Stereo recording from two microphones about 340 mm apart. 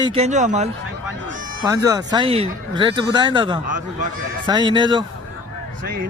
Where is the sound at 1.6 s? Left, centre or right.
Centre.